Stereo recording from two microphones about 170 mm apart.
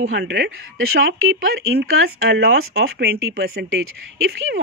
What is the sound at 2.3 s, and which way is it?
Speech, 75° right (ahead or behind).